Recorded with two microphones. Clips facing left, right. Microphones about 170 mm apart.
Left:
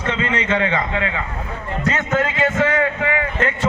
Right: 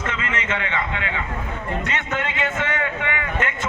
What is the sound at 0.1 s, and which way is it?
A man's voice, 30° left (ahead or behind).